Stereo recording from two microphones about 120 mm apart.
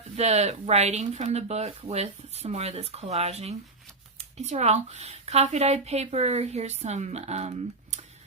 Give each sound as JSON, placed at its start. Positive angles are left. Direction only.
{"t": 0.2, "sound": "speech", "side_deg": -65}